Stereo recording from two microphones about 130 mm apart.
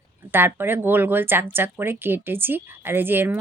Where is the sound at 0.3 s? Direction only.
15° right (ahead or behind).